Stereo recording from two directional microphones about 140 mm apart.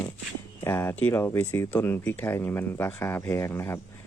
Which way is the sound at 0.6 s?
20° left (ahead or behind).